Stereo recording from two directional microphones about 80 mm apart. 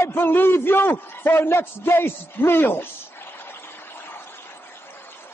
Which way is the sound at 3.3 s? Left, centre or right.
Left.